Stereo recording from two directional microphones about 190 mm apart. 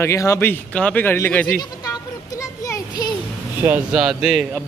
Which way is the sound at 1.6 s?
20° left (ahead or behind).